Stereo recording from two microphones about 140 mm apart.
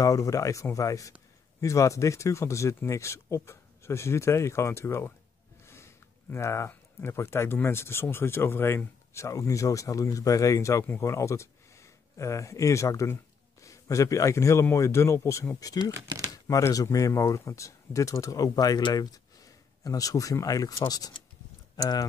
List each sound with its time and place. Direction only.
0.0 s speech: 25° left (ahead or behind)